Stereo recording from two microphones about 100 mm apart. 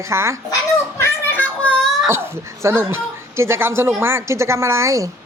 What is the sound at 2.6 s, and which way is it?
A woman's voice, 25° right (ahead or behind).